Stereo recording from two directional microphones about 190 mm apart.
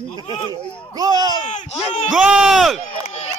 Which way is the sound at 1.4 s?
35° left (ahead or behind).